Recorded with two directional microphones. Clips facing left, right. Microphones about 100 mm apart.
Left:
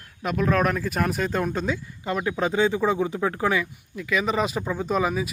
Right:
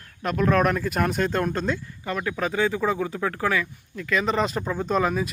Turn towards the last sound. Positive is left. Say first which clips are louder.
# right 1 dB
turn(degrees=5)  # may be behind; listen again after turning